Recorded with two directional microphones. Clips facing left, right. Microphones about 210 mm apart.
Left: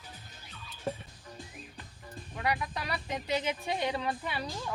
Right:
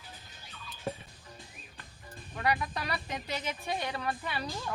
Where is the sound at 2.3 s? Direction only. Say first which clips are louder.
Right 1 dB; 15° left (ahead or behind).